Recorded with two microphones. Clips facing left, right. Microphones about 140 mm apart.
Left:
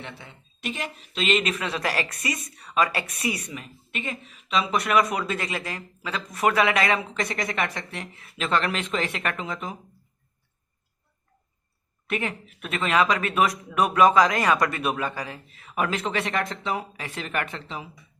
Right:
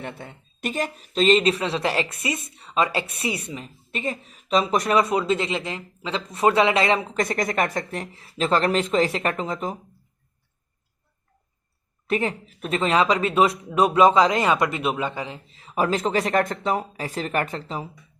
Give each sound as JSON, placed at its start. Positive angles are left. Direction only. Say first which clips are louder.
{"t": 0.0, "sound": "speech", "louder": "right 6 dB", "side_deg": -50}
{"t": 7.1, "sound": "speech", "louder": "right 5 dB", "side_deg": -45}
{"t": 12.0, "sound": "speech", "louder": "right 5 dB", "side_deg": -35}